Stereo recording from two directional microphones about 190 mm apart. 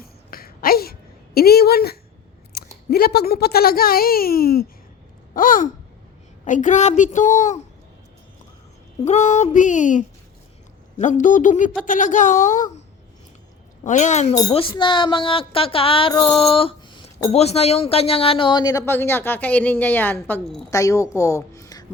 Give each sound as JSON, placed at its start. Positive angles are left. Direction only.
{"t": 0.0, "sound": "a sound", "side_deg": 50}
{"t": 2.5, "sound": "speech", "side_deg": 55}
{"t": 5.3, "sound": "a sound", "side_deg": 45}
{"t": 6.4, "sound": "a woman's voice", "side_deg": 40}
{"t": 9.0, "sound": "a woman's voice", "side_deg": 35}
{"t": 13.8, "sound": "a woman's voice", "side_deg": 40}
{"t": 14.5, "sound": "speech", "side_deg": 25}